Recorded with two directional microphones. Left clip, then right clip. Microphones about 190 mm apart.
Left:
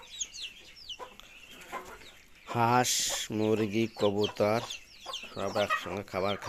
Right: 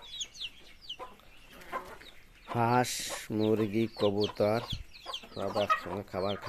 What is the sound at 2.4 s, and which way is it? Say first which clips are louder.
Speech: left 2 dB; 5° right (ahead or behind).